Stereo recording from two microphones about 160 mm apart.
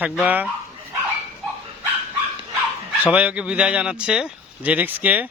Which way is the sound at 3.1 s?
10° right (ahead or behind).